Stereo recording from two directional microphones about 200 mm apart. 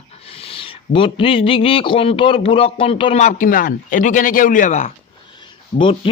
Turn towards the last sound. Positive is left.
turn(degrees=25)  # may be behind; listen again after turning